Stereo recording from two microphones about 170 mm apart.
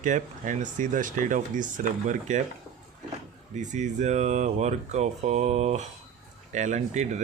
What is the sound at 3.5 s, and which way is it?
Speech, 45° right (ahead or behind).